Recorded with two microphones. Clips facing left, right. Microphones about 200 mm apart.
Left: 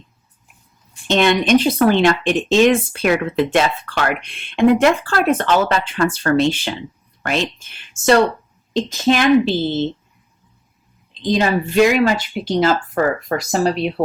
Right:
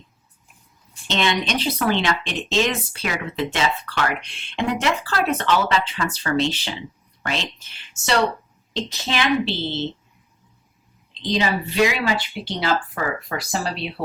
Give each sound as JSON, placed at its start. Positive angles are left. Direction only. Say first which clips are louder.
{"t": 1.0, "sound": "speech", "louder": "left 7 dB", "side_deg": 55}
{"t": 11.1, "sound": "speech", "louder": "left 5 dB", "side_deg": 50}